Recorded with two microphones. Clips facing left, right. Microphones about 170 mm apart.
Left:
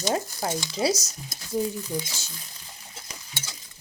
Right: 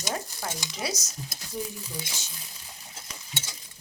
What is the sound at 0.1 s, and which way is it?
Speech, 35° left (ahead or behind).